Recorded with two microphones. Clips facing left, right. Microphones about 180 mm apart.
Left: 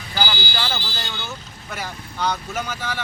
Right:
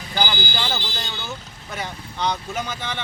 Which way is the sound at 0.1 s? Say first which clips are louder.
Right 1 dB; 20° right (ahead or behind).